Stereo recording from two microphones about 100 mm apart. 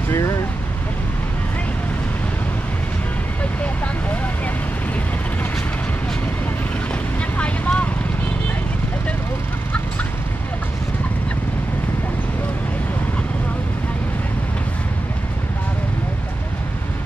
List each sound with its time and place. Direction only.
3.6 s vehicle: 15° left (ahead or behind)
7.3 s vehicle: 15° left (ahead or behind)